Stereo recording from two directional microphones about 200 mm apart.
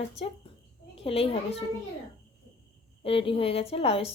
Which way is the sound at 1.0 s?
30° left (ahead or behind).